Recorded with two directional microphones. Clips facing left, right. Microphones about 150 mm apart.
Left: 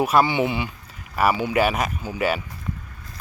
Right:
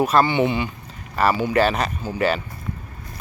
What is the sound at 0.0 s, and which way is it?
Speech, 10° left (ahead or behind).